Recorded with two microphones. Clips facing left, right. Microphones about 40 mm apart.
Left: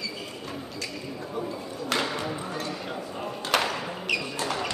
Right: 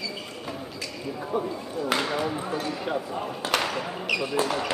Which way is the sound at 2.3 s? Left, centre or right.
Centre.